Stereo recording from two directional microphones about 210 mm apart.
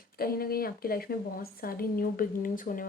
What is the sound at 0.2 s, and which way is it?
A woman's voice, 45° left (ahead or behind).